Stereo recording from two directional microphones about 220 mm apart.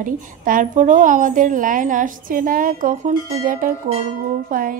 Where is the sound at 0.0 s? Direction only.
35° right (ahead or behind).